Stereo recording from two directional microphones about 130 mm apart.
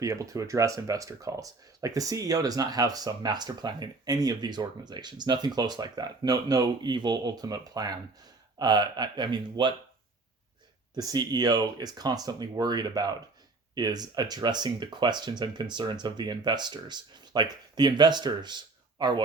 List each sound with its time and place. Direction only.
0.0 s speech: 25° right (ahead or behind)
10.9 s speech: 30° right (ahead or behind)